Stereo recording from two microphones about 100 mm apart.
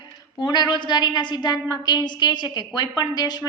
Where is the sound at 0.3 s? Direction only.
45° left (ahead or behind).